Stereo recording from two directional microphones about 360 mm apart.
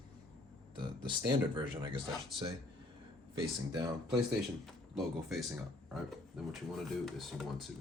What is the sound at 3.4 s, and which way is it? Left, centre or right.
Speech, centre.